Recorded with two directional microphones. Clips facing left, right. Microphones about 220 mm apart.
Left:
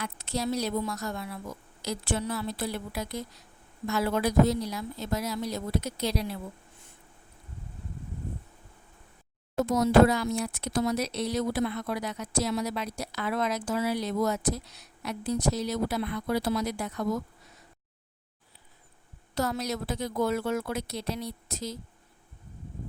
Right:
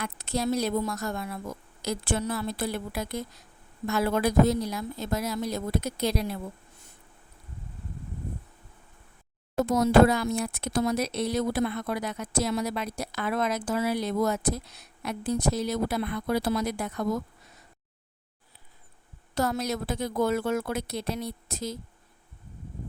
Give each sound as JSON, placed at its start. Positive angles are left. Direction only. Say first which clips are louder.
{"t": 0.0, "sound": "speech", "louder": "right 2 dB", "side_deg": -50}
{"t": 9.6, "sound": "speech", "louder": "right 1 dB", "side_deg": -55}
{"t": 19.3, "sound": "speech", "louder": "right 2 dB", "side_deg": -50}